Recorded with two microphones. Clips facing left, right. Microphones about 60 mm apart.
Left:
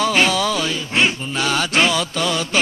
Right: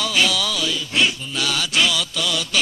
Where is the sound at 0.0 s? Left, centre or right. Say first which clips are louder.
Left 4 dB; left.